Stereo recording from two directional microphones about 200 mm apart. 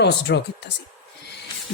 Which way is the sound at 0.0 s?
60° left (ahead or behind).